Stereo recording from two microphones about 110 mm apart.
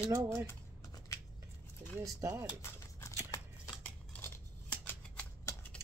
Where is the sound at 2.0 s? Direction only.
30° right (ahead or behind).